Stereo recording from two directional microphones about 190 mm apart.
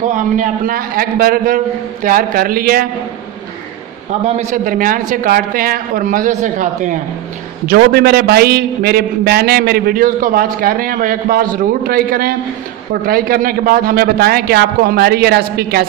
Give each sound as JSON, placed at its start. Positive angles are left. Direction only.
{"t": 0.1, "sound": "a man's voice", "side_deg": -45}
{"t": 4.4, "sound": "a man's voice", "side_deg": -40}
{"t": 7.6, "sound": "a man's voice", "side_deg": -55}